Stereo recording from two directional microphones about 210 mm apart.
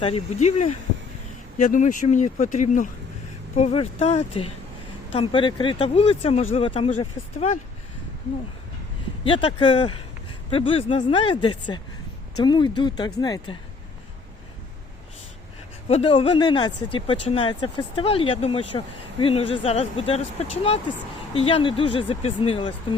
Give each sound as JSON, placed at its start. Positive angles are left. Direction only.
{"t": 0.0, "sound": "speech", "side_deg": 30}
{"t": 9.2, "sound": "speech", "side_deg": 25}
{"t": 15.9, "sound": "speech", "side_deg": 25}